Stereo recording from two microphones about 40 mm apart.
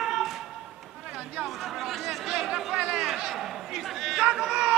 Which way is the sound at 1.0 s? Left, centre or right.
Right.